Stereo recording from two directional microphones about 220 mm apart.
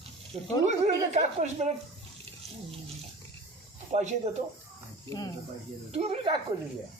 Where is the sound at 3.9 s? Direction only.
30° right (ahead or behind).